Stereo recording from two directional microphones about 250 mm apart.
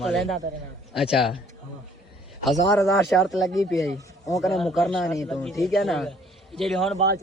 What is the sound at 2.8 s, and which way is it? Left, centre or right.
Speech, centre.